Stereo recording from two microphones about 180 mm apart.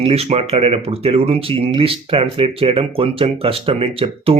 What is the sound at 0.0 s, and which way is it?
Speech, 35° right (ahead or behind).